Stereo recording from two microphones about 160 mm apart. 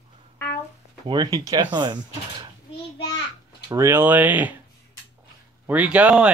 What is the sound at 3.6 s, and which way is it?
Speech, 15° right (ahead or behind).